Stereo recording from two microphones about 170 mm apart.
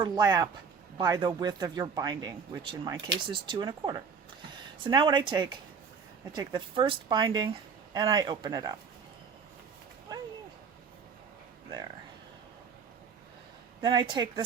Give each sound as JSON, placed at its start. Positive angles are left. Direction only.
{"t": 0.0, "sound": "speech", "side_deg": -25}
{"t": 13.8, "sound": "speech", "side_deg": -25}